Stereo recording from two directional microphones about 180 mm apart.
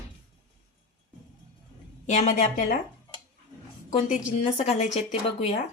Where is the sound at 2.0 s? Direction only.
40° left (ahead or behind).